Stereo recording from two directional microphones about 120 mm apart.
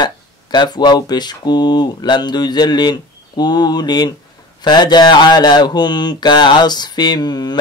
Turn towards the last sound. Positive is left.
turn(degrees=35)  # may be behind; listen again after turning